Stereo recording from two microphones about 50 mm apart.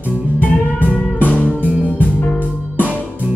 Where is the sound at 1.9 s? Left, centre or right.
Left.